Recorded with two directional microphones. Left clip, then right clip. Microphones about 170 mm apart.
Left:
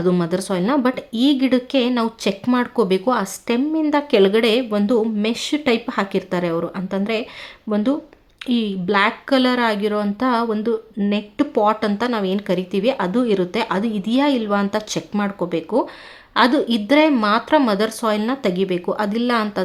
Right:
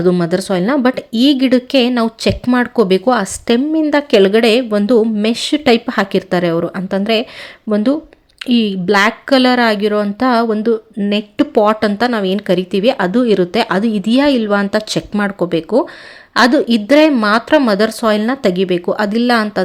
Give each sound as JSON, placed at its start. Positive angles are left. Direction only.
{"t": 0.0, "sound": "a woman's voice", "side_deg": -20}
{"t": 8.4, "sound": "a woman's voice", "side_deg": -25}